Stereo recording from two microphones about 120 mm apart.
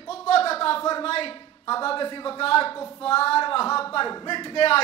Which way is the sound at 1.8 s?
50° left (ahead or behind).